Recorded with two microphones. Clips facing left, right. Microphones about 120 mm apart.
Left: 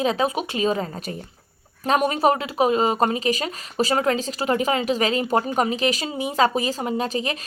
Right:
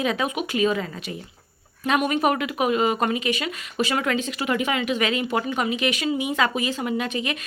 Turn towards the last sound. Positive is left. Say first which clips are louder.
# left 1 dB
turn(degrees=35)  # may be behind; listen again after turning